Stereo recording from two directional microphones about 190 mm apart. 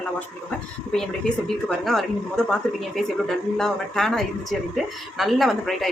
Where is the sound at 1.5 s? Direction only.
Centre (ahead or behind).